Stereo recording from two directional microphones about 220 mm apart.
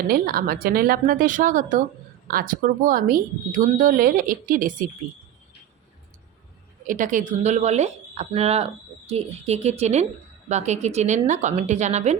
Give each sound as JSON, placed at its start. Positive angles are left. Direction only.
{"t": 0.1, "sound": "speech", "side_deg": -40}
{"t": 6.8, "sound": "speech", "side_deg": -35}